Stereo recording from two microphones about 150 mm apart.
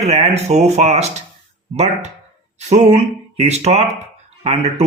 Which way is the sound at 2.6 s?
50° right (ahead or behind).